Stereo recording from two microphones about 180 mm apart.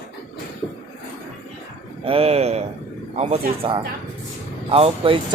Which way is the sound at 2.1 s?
35° right (ahead or behind).